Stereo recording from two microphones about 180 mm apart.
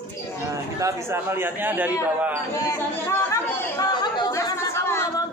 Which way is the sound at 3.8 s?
25° left (ahead or behind).